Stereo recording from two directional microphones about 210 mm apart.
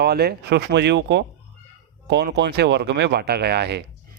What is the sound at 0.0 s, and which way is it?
Speech, 50° right (ahead or behind).